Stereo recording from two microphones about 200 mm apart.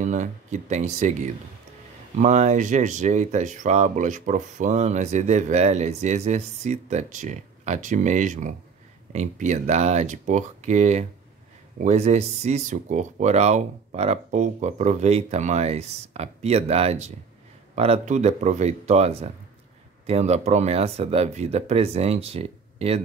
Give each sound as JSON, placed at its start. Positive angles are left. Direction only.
{"t": 0.0, "sound": "speech", "side_deg": -40}